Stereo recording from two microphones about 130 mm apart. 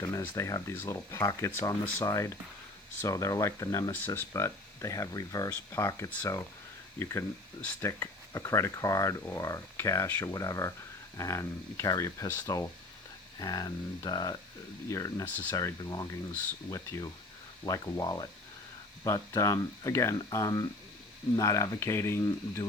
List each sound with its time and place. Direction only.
0.2 s speech: 25° left (ahead or behind)